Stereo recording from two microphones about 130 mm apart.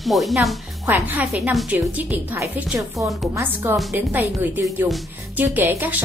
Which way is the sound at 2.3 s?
10° right (ahead or behind).